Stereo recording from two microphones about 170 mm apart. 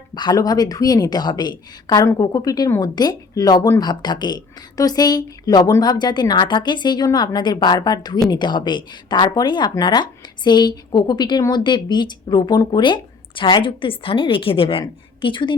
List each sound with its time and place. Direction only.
0.1 s speech: 25° left (ahead or behind)